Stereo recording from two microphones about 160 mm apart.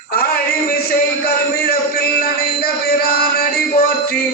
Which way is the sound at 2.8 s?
75° left (ahead or behind).